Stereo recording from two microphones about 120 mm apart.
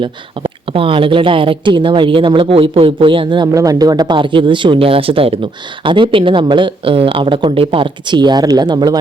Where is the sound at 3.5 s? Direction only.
30° right (ahead or behind).